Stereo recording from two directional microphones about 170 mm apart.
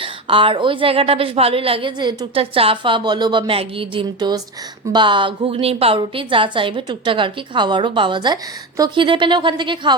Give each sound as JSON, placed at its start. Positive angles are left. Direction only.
{"t": 0.0, "sound": "a woman's voice", "side_deg": -30}